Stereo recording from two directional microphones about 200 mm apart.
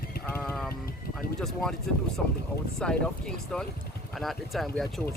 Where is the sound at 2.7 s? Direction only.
5° left (ahead or behind).